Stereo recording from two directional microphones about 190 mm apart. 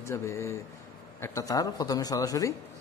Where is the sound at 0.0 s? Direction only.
15° left (ahead or behind).